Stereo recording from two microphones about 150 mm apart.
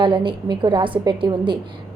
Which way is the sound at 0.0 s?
35° right (ahead or behind).